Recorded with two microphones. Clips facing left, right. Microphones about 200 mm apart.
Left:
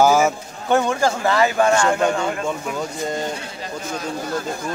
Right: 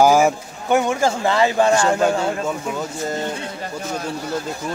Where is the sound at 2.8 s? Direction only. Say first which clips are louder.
Even; 5° right (ahead or behind).